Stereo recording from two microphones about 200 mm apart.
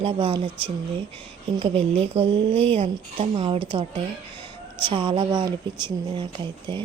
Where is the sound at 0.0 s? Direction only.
25° right (ahead or behind).